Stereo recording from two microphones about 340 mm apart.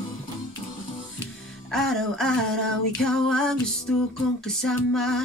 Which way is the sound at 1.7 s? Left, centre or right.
Centre.